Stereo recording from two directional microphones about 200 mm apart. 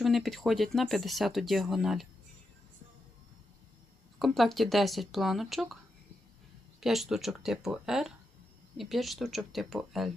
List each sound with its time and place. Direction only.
0.0 s speech: centre (ahead or behind)
4.2 s speech: centre (ahead or behind)
6.7 s speech: centre (ahead or behind)